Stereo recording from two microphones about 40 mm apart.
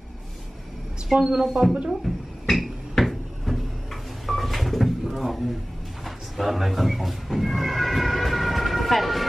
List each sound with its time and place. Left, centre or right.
1.1 s a woman's voice: centre
2.0 s a sound: centre
6.0 s speech: centre